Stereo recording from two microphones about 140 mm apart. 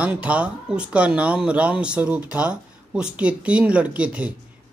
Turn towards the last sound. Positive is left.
turn(degrees=-10)  # may be behind; listen again after turning